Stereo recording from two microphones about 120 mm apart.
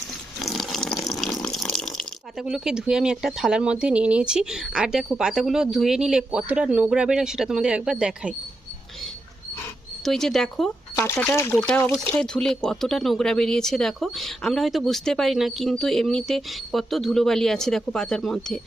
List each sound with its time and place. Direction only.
0.3 s water: centre (ahead or behind)
10.0 s speech: 5° left (ahead or behind)
10.9 s speech: 20° left (ahead or behind)
12.1 s speech: 5° left (ahead or behind)